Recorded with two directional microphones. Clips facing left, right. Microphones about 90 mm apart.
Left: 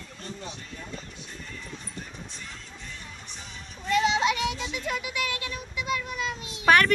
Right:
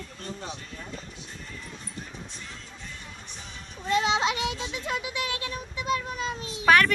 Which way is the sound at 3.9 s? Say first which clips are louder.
Left 1 dB; 25° right (ahead or behind).